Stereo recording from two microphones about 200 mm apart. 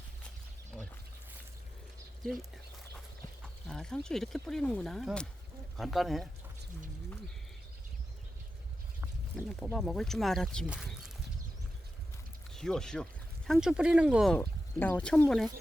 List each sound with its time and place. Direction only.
0.7 s a sound: centre (ahead or behind)
2.2 s speech: centre (ahead or behind)
9.3 s a sound: centre (ahead or behind)
9.7 s speech: centre (ahead or behind)
12.5 s speech: centre (ahead or behind)
14.3 s speech: 10° left (ahead or behind)